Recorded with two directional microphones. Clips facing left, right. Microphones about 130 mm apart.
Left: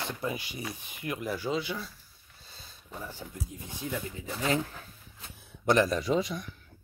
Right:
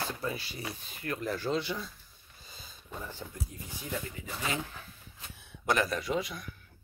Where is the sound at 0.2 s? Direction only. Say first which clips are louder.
Left 2 dB; 15° left (ahead or behind).